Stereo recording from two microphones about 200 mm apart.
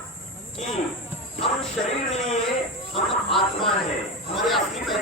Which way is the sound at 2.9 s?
25° left (ahead or behind).